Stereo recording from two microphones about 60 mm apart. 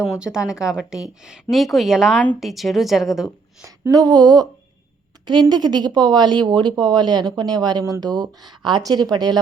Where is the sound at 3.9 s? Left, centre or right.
Right.